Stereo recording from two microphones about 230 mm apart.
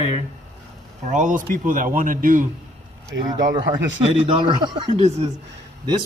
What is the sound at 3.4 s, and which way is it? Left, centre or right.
Speech, right.